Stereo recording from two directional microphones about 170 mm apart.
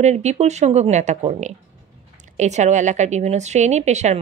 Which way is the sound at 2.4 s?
45° right (ahead or behind).